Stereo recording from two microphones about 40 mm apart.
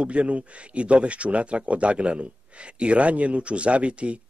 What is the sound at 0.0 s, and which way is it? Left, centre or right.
Speech, right.